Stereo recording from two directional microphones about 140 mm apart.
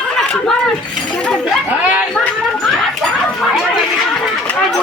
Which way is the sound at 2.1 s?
10° left (ahead or behind).